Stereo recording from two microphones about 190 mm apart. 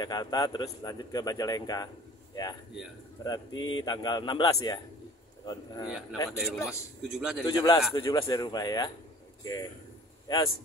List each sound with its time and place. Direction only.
0.0 s speech: 20° left (ahead or behind)
3.3 s a man's voice: 20° left (ahead or behind)
6.4 s a man's voice: centre (ahead or behind)
7.4 s a man's voice: 25° left (ahead or behind)